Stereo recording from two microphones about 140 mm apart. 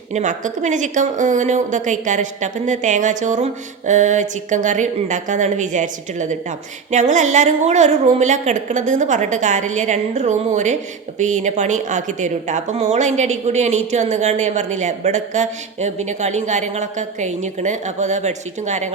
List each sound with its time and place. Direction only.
0.1 s a woman's voice: 60° right (ahead or behind)